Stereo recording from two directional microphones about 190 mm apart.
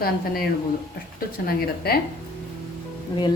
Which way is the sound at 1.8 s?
55° left (ahead or behind).